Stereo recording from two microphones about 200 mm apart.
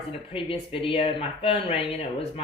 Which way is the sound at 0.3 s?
25° left (ahead or behind).